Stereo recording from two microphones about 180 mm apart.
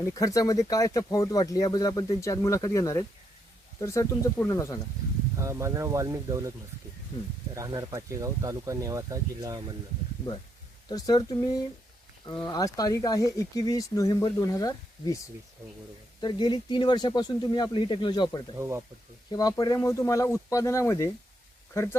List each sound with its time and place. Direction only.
0.1 s speech: 20° left (ahead or behind)
5.4 s speech: 15° right (ahead or behind)
7.5 s speech: 20° right (ahead or behind)
10.8 s speech: 20° left (ahead or behind)
16.2 s speech: 25° left (ahead or behind)
18.5 s speech: 15° right (ahead or behind)
19.3 s speech: 20° left (ahead or behind)